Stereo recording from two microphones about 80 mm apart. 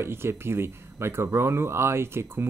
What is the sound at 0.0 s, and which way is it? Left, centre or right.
Speech, right.